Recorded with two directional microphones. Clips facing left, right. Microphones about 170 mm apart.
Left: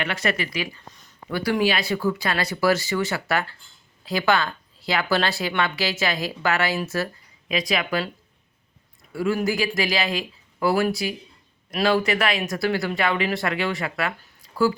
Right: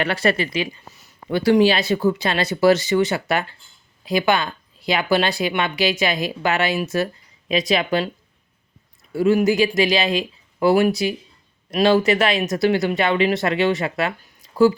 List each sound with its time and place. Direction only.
0.0 s speech: 35° right (ahead or behind)
0.9 s a sound: 5° right (ahead or behind)
1.3 s speech: 25° right (ahead or behind)
9.1 s speech: 20° right (ahead or behind)